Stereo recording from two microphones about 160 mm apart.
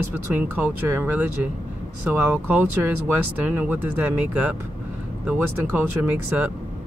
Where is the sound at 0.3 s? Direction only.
10° right (ahead or behind).